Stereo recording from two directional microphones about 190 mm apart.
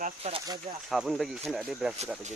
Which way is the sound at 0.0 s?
30° right (ahead or behind).